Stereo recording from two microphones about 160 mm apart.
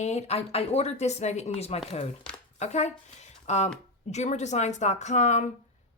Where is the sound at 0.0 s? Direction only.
45° left (ahead or behind).